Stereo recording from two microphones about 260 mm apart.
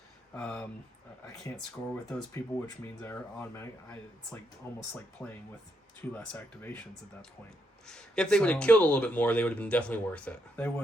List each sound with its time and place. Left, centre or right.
0.3 s speech: centre
7.9 s speech: centre